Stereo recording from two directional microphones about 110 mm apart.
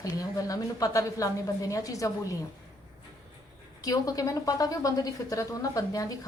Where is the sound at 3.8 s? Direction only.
35° left (ahead or behind).